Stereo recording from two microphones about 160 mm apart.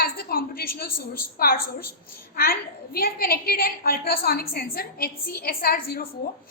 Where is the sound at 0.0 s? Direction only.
70° left (ahead or behind).